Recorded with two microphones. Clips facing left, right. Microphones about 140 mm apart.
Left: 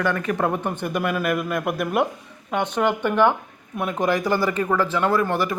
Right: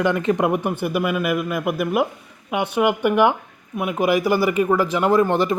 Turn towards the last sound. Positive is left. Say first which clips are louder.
# right 4 dB
turn(degrees=-20)  # may be behind; listen again after turning